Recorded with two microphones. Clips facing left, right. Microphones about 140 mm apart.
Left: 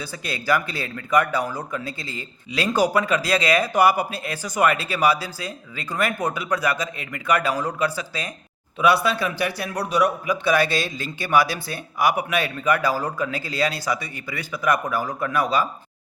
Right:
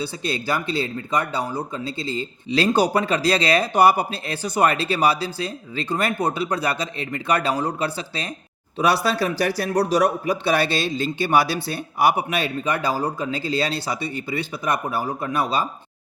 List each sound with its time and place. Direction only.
0.0 s a man's voice: 25° right (ahead or behind)